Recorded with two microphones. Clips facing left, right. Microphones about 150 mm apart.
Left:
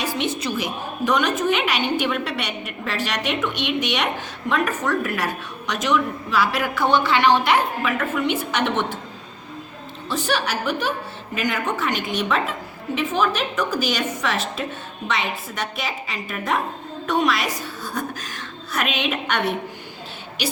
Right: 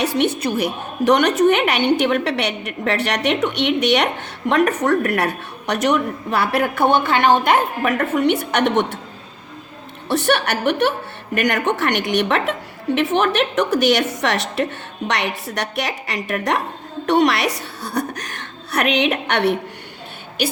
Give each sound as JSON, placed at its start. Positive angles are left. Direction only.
{"t": 0.0, "sound": "a woman's voice", "side_deg": -65}
{"t": 10.1, "sound": "a woman's voice", "side_deg": -65}